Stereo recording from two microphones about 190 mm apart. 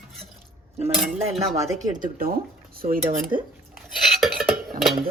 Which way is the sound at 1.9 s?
50° right (ahead or behind).